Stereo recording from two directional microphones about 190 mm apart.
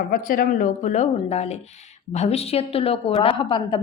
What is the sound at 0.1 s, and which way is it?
A woman's voice, 50° left (ahead or behind).